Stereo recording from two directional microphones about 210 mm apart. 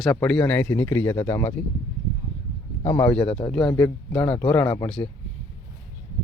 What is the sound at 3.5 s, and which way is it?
Speech, 5° left (ahead or behind).